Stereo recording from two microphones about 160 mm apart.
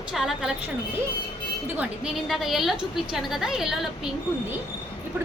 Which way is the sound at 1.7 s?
5° right (ahead or behind).